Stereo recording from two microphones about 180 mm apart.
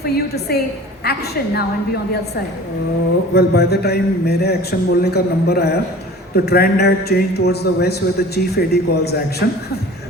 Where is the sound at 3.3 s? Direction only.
65° left (ahead or behind).